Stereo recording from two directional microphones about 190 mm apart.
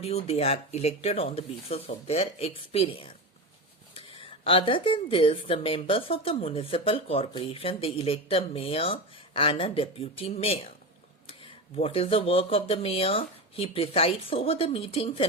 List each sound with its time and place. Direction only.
0.0 s speech: 30° left (ahead or behind)